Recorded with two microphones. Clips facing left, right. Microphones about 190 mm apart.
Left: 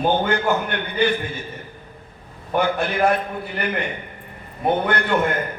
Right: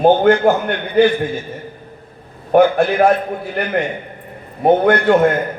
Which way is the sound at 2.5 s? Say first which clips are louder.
Right 9 dB; 60° right (ahead or behind).